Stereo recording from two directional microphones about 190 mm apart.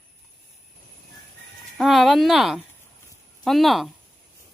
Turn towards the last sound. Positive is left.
turn(degrees=0)  # may be behind; listen again after turning